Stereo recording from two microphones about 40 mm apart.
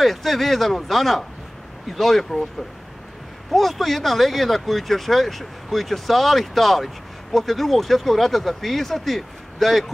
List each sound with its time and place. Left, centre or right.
0.0 s speech: centre
3.5 s speech: centre